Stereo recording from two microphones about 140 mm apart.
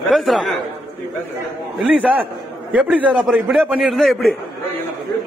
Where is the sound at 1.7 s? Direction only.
10° right (ahead or behind).